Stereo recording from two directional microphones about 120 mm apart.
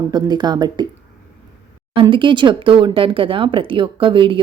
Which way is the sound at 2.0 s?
45° right (ahead or behind).